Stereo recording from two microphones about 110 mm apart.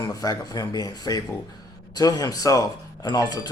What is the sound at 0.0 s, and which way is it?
Speech, 35° left (ahead or behind).